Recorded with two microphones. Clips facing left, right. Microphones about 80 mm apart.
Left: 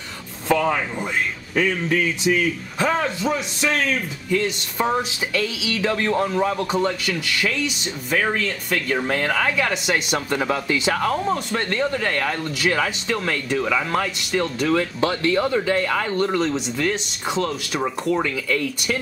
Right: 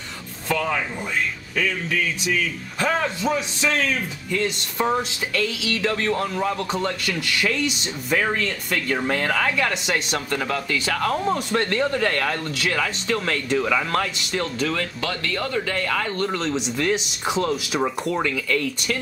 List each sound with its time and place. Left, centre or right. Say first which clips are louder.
0.5 s speech: left 4 dB; left
2.8 s speech: left 1 dB; centre
10.3 s speech: left 3 dB; centre
11.1 s speech: even; centre
15.0 s speech: left 7 dB; left